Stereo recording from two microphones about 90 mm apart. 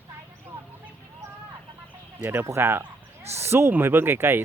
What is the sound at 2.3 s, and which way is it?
Speech, 30° right (ahead or behind).